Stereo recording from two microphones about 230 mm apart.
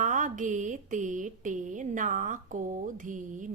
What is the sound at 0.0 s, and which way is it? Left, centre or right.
Speech, right.